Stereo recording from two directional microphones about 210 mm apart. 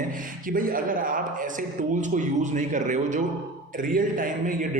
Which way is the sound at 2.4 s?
35° right (ahead or behind).